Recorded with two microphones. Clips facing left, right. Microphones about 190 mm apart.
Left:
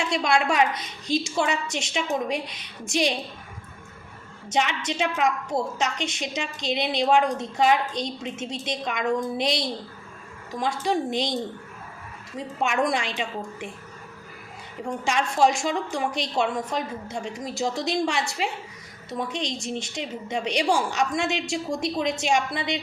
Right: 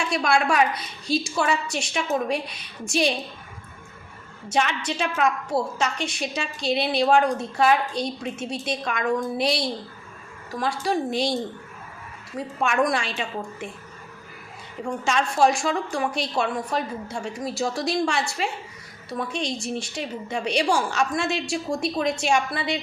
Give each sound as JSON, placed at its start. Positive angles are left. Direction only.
{"t": 0.0, "sound": "a woman's voice", "side_deg": 20}
{"t": 4.5, "sound": "a woman's voice", "side_deg": 20}
{"t": 12.4, "sound": "a woman's voice", "side_deg": 20}
{"t": 14.8, "sound": "a woman's voice", "side_deg": 15}